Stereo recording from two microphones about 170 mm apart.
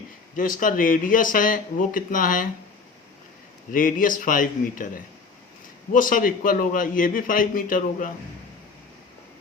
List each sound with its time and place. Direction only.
0.3 s a man's voice: 55° left (ahead or behind)
3.7 s a man's voice: 50° left (ahead or behind)